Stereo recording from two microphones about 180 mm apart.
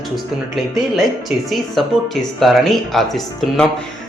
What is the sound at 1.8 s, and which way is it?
A man's voice, centre (ahead or behind).